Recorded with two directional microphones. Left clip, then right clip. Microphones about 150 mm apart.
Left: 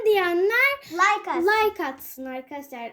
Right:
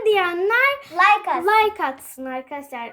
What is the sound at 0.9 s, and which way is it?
Speech, 30° right (ahead or behind).